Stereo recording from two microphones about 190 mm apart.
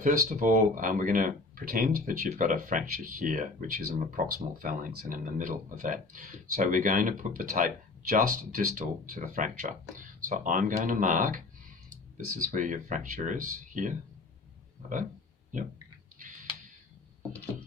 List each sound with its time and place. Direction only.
0.0 s speech: 45° right (ahead or behind)